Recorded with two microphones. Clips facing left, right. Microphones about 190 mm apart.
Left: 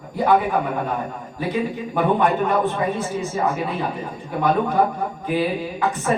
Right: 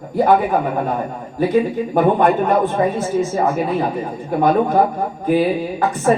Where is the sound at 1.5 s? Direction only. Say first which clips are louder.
Right 5 dB; 45° right (ahead or behind).